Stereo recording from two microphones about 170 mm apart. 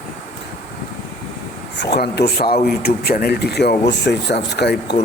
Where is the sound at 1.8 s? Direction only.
75° left (ahead or behind).